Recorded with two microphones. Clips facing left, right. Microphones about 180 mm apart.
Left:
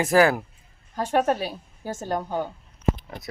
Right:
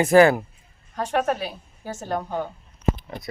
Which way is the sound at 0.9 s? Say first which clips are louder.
Left 1 dB; 35° left (ahead or behind).